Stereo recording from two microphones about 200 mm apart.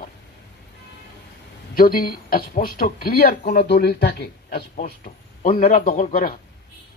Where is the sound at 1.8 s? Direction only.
45° left (ahead or behind).